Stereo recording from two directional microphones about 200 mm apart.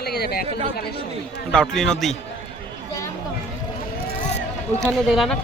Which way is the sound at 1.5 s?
5° left (ahead or behind).